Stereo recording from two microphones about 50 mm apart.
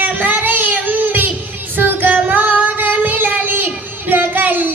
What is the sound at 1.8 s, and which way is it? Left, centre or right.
Female singing, right.